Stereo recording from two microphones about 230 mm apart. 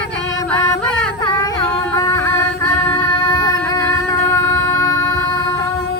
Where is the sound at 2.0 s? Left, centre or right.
Centre.